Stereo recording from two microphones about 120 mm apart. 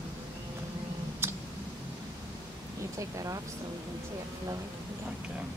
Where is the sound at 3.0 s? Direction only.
25° right (ahead or behind).